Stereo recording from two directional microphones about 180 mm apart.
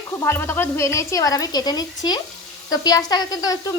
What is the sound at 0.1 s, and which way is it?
A woman's voice, 15° left (ahead or behind).